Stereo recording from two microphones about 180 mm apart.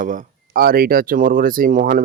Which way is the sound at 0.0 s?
45° right (ahead or behind).